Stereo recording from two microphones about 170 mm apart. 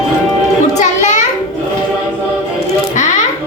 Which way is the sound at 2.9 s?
45° left (ahead or behind).